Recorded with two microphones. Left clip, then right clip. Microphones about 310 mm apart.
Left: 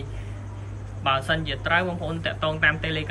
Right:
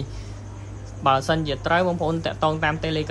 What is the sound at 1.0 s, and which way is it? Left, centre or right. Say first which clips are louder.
Speech: right 3 dB; centre.